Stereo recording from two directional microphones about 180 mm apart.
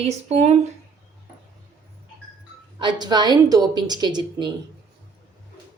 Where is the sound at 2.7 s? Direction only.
25° right (ahead or behind).